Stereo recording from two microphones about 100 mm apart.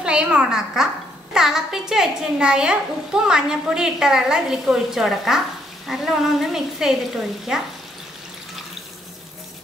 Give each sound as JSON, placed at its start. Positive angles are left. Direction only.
{"t": 0.0, "sound": "a woman's voice", "side_deg": -10}